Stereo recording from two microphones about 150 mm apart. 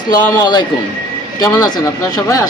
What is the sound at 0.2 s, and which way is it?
A man's voice, 15° left (ahead or behind).